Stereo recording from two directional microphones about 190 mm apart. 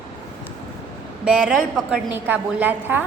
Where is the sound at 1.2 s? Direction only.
5° right (ahead or behind).